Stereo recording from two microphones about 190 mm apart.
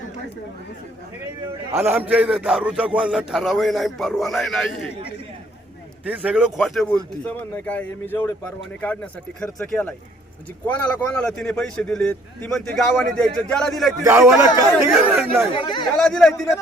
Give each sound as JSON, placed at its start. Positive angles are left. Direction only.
{"t": 1.7, "sound": "a man's voice", "side_deg": -10}
{"t": 6.1, "sound": "a man's voice", "side_deg": -5}
{"t": 14.0, "sound": "speech", "side_deg": -15}
{"t": 14.9, "sound": "a man's voice", "side_deg": 0}
{"t": 15.5, "sound": "speech", "side_deg": 25}
{"t": 16.0, "sound": "a man's voice", "side_deg": 5}